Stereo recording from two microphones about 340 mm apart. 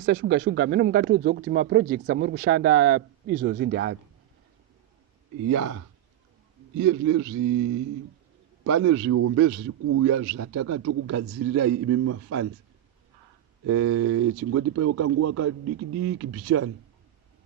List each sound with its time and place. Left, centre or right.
0.0 s speech: right
5.5 s a man's voice: right
8.6 s a man's voice: right
13.7 s a man's voice: right